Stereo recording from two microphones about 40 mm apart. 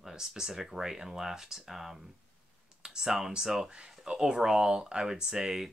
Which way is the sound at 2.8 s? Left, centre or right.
Centre.